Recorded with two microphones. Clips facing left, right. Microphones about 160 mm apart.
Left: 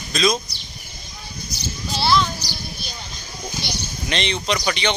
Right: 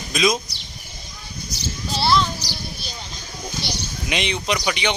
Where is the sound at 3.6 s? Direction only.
30° right (ahead or behind).